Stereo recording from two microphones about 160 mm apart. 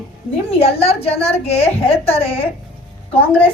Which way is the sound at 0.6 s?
40° left (ahead or behind).